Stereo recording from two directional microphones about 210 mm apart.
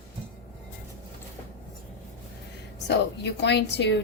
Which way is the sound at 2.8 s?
55° left (ahead or behind).